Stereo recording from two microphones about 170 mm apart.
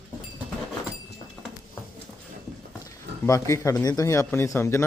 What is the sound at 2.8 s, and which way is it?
Speech, 20° left (ahead or behind).